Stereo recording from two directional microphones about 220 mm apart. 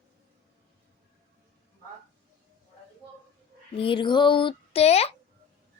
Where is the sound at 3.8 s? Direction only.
25° left (ahead or behind).